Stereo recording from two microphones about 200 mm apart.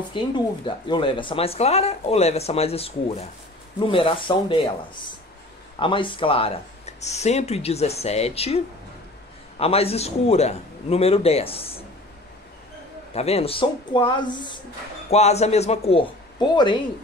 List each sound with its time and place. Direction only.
0.1 s speech: 25° left (ahead or behind)
13.1 s speech: 30° left (ahead or behind)